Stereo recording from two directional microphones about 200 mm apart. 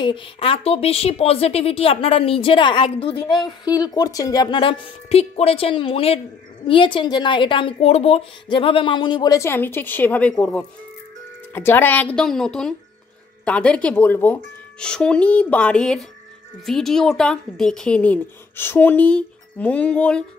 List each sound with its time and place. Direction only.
0.0 s a woman's voice: 25° left (ahead or behind); by 20.2 s 5° left (ahead or behind)